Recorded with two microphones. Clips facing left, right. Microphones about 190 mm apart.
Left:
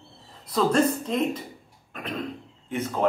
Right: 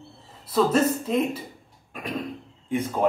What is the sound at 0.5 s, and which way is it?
Speech, 5° right (ahead or behind).